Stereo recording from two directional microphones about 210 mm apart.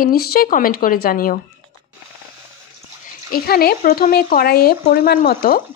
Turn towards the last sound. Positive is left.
turn(degrees=45)  # may be behind; listen again after turning